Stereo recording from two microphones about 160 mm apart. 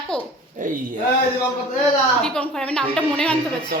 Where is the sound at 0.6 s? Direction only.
55° right (ahead or behind).